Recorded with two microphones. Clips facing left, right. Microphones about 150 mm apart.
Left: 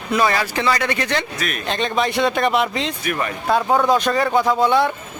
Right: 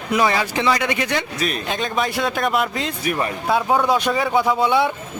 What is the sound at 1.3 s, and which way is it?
Speech, 30° right (ahead or behind).